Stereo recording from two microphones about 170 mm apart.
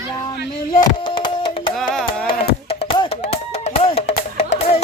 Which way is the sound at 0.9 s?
25° left (ahead or behind).